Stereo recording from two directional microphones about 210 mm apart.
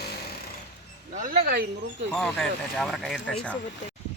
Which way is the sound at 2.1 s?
5° left (ahead or behind).